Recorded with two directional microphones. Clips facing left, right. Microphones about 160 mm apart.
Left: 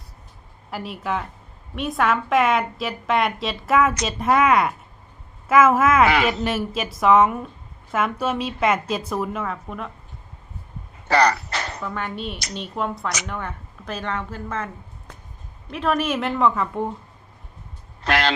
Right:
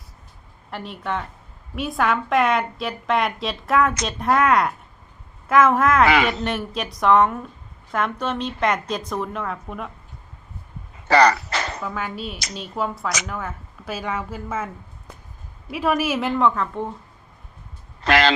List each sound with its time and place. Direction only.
0.7 s a woman's voice: 5° left (ahead or behind)
11.1 s a sound: 90° right
11.8 s a woman's voice: 5° right (ahead or behind)
18.0 s speech: 90° right